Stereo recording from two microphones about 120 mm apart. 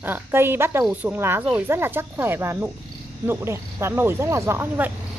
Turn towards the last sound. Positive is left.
turn(degrees=-20)  # may be behind; listen again after turning